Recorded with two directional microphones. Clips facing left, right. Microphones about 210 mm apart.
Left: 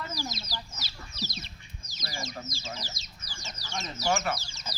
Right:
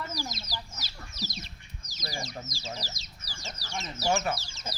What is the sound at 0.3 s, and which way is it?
Chicken, 45° right (ahead or behind).